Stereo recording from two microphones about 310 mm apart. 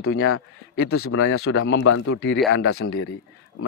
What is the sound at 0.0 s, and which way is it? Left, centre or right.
A man's voice, left.